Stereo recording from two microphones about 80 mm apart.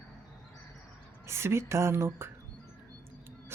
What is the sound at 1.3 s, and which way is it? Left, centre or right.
Speech, right.